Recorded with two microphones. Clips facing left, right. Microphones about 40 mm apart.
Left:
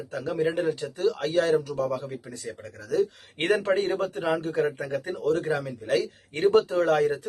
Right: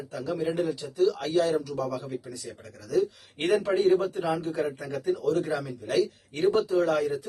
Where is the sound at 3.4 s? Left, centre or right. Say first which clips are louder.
Even; left.